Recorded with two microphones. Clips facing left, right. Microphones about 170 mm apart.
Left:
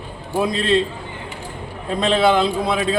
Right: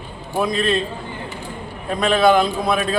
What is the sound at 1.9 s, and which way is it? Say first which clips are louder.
A man's voice: right 1 dB; 25° left (ahead or behind).